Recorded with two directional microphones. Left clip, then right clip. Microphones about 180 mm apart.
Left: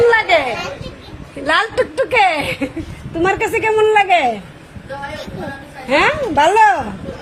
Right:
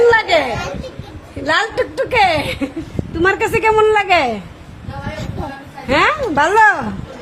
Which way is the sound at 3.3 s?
25° right (ahead or behind).